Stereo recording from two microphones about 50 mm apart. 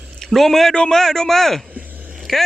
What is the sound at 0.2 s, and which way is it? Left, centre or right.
A man's voice, centre.